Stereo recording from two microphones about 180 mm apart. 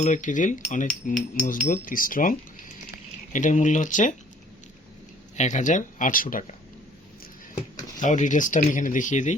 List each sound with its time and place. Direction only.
0.0 s speech: 45° left (ahead or behind)
3.3 s speech: 45° left (ahead or behind)
5.4 s speech: 45° left (ahead or behind)
7.9 s speech: 45° left (ahead or behind)